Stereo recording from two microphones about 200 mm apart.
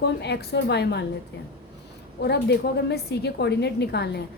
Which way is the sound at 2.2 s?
55° left (ahead or behind).